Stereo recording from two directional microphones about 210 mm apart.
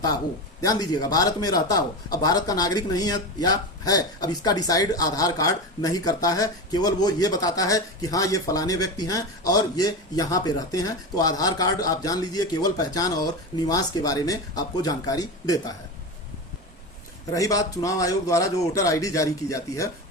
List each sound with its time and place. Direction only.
0.6 s a man's voice: 20° left (ahead or behind)
17.3 s a man's voice: 15° left (ahead or behind)